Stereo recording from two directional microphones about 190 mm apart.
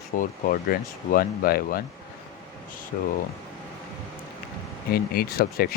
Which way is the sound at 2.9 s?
45° left (ahead or behind).